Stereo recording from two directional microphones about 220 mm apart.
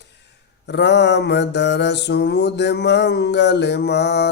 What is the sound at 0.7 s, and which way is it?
Mantra, 50° left (ahead or behind).